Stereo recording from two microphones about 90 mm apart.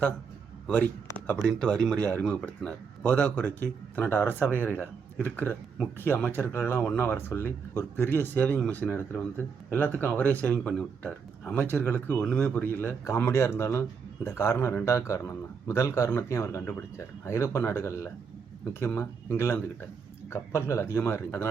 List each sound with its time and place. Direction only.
1.5 s a man's voice: 10° left (ahead or behind); by 21.4 s 30° left (ahead or behind)